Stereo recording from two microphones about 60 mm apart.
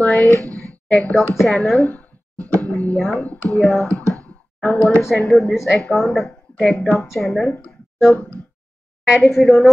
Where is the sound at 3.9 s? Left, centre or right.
Right.